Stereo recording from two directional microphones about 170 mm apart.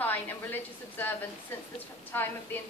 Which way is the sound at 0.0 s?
10° left (ahead or behind).